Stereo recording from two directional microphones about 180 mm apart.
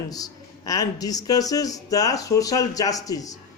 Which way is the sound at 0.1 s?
20° left (ahead or behind).